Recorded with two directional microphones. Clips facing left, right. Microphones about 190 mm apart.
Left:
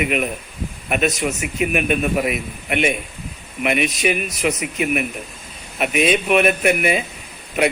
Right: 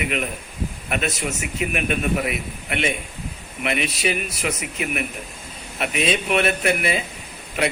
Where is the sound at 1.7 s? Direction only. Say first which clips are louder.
Left 3 dB; 20° left (ahead or behind).